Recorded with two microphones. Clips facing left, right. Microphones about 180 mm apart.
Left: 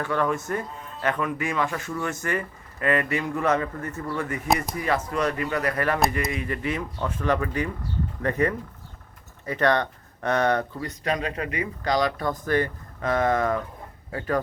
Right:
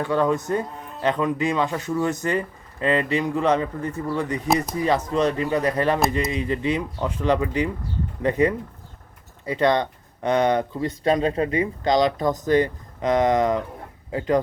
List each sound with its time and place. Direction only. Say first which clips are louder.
0.0 s speech: right 4 dB; 20° right (ahead or behind)
10.8 s speech: right 7 dB; 30° right (ahead or behind)